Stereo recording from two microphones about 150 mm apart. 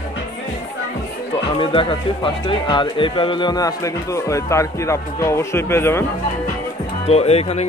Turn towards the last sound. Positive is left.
turn(degrees=45)  # may be behind; listen again after turning